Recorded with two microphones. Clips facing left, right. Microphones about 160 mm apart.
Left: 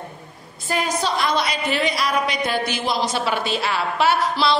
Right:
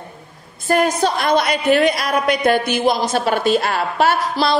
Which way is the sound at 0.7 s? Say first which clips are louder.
Right 7 dB; 55° right (ahead or behind).